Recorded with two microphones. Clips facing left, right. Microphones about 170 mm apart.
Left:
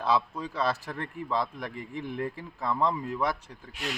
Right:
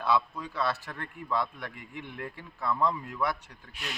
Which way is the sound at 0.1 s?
30° left (ahead or behind).